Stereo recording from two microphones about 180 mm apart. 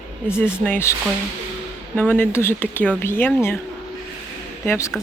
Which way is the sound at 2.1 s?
15° left (ahead or behind).